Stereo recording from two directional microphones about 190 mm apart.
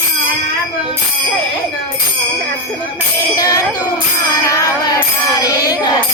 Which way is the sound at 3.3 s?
20° left (ahead or behind).